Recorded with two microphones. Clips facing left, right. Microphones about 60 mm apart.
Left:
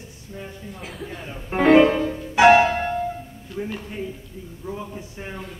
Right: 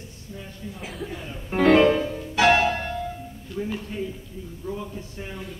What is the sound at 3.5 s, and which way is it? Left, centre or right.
Speech, centre.